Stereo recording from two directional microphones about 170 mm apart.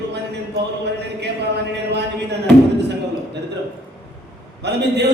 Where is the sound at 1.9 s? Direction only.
85° right.